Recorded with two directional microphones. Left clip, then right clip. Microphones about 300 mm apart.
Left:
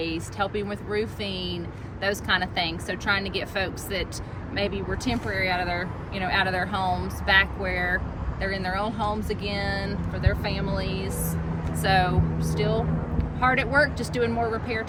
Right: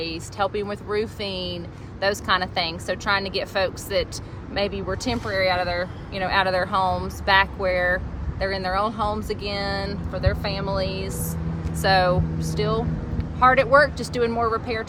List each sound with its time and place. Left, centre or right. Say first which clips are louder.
0.0 s speech: right 2 dB; centre